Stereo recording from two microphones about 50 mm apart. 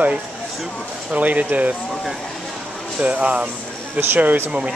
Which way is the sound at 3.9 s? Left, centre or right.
Right.